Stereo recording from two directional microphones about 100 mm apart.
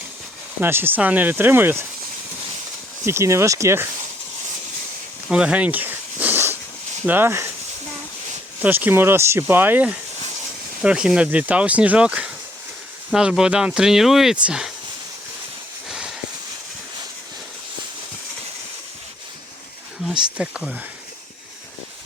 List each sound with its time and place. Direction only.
0.6 s speech: 20° right (ahead or behind)
3.1 s speech: 25° right (ahead or behind)
5.3 s snake: 10° right (ahead or behind)
7.0 s speech: 20° right (ahead or behind)
8.6 s speech: 20° right (ahead or behind)
15.9 s a sound: 5° right (ahead or behind)
20.1 s speech: 5° right (ahead or behind)